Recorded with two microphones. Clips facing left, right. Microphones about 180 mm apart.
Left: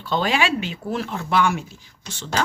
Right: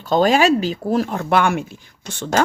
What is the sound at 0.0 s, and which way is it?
Speech, 45° right (ahead or behind).